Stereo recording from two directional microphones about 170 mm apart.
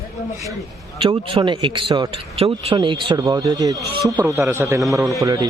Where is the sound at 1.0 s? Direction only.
30° right (ahead or behind).